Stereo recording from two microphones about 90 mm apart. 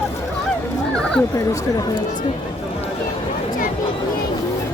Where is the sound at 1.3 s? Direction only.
40° left (ahead or behind).